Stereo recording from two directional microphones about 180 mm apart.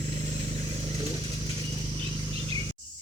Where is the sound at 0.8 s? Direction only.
35° right (ahead or behind).